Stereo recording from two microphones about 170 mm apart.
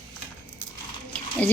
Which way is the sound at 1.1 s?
10° left (ahead or behind).